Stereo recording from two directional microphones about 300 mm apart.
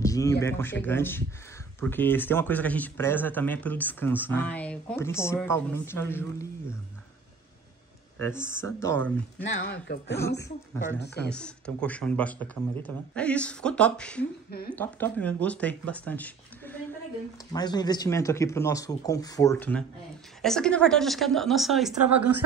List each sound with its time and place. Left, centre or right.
0.0 s a sound: centre
0.4 s speech: centre
8.2 s speech: centre
9.5 s speech: left
10.4 s speech: centre